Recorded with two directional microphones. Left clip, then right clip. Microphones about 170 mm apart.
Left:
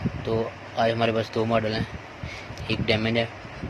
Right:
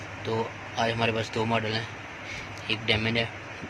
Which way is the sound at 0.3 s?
45° left (ahead or behind).